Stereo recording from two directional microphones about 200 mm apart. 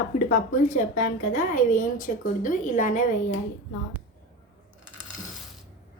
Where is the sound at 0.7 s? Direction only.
40° left (ahead or behind).